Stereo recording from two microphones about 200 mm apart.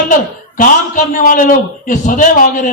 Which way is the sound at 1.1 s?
40° left (ahead or behind).